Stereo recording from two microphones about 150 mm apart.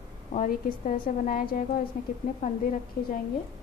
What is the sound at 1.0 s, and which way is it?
A woman's voice, 70° left (ahead or behind).